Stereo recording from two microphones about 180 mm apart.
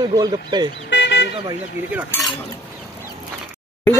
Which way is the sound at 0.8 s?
80° left.